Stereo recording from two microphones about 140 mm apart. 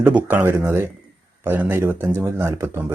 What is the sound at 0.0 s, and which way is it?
Speech, 15° right (ahead or behind).